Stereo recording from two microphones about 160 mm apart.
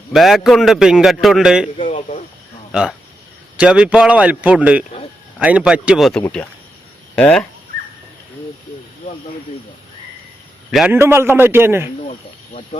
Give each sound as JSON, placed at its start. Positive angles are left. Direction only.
{"t": 0.1, "sound": "a man's voice", "side_deg": 0}
{"t": 1.9, "sound": "speech", "side_deg": 45}
{"t": 3.6, "sound": "speech", "side_deg": -5}
{"t": 10.7, "sound": "a man's voice", "side_deg": 0}
{"t": 10.9, "sound": "speech", "side_deg": -15}
{"t": 12.7, "sound": "speech", "side_deg": 45}